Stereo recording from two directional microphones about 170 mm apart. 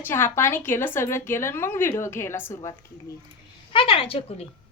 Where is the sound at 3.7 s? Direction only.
30° left (ahead or behind).